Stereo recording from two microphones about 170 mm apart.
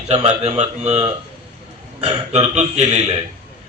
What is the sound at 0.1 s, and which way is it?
A man's voice, 40° right (ahead or behind).